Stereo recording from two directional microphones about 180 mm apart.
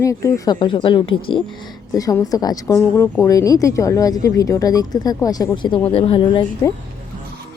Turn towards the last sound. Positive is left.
turn(degrees=25)  # may be behind; listen again after turning